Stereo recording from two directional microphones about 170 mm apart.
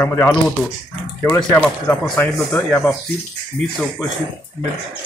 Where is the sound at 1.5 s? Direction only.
10° left (ahead or behind).